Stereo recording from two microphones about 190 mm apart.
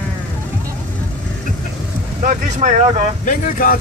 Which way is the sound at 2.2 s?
40° right (ahead or behind).